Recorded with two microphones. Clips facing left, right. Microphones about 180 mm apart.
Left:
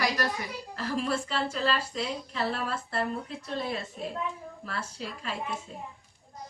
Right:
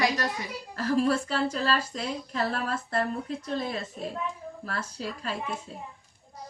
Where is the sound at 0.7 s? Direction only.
40° right (ahead or behind).